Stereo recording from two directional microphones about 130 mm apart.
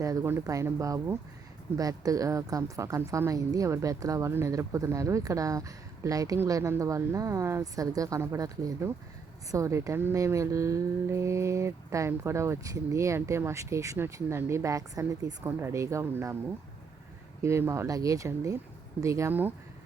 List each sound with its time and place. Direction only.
0.0 s a woman's voice: 25° right (ahead or behind)
17.4 s a woman's voice: 20° right (ahead or behind)